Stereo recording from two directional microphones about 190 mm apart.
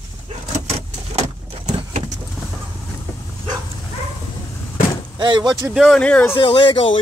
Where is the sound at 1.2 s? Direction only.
30° right (ahead or behind).